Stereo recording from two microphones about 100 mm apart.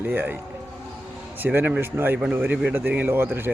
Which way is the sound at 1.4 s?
20° right (ahead or behind).